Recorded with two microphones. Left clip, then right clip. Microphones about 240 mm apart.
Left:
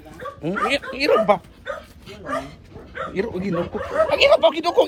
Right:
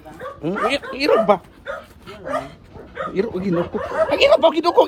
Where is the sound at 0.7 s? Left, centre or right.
Centre.